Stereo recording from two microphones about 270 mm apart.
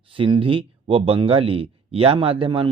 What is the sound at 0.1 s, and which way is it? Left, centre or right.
Speech, centre.